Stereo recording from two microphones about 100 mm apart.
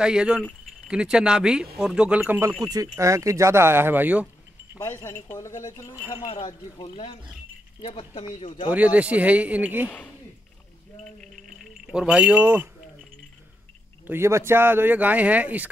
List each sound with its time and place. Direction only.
0.0 s speech: 10° right (ahead or behind)
2.1 s speech: 20° right (ahead or behind)
2.7 s speech: 35° right (ahead or behind); by 4.3 s 15° right (ahead or behind)
4.8 s speech: 25° left (ahead or behind)
5.9 s speech: 20° right (ahead or behind)
6.2 s speech: 60° left (ahead or behind); by 8.1 s 75° left (ahead or behind)
8.4 s speech: 55° left (ahead or behind)
8.6 s speech: 15° right (ahead or behind)
11.5 s a sound: 5° right (ahead or behind)
12.4 s speech: 20° right (ahead or behind)
14.0 s speech: 25° right (ahead or behind)